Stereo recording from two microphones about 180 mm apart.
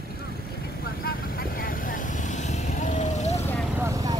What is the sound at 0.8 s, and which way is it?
Vehicle, 55° left (ahead or behind).